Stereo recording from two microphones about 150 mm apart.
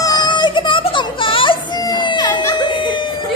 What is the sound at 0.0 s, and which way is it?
Music, 30° left (ahead or behind).